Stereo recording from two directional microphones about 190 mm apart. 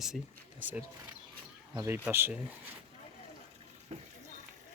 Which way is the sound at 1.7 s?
15° right (ahead or behind).